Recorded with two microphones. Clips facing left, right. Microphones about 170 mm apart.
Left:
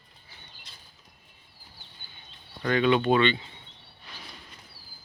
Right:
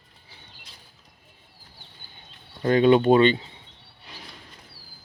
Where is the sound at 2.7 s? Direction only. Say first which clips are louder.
Right 6 dB; 40° right (ahead or behind).